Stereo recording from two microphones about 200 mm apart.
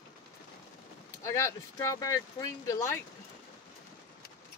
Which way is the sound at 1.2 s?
15° left (ahead or behind).